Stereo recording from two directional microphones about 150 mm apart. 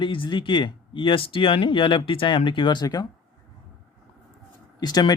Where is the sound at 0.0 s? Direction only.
35° left (ahead or behind).